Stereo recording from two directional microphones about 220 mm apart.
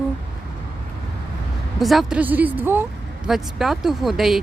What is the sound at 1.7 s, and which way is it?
Speech, centre (ahead or behind).